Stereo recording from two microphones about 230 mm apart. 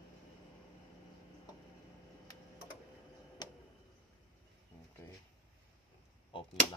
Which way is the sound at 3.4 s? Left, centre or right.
Centre.